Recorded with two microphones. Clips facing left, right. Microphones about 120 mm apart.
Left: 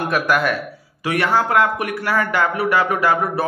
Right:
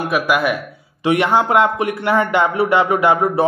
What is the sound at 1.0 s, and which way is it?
A man's voice, 20° right (ahead or behind).